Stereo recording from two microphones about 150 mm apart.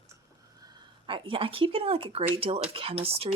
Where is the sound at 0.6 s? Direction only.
25° right (ahead or behind).